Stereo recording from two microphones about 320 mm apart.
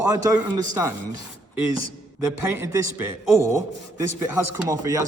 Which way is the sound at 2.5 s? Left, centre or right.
Centre.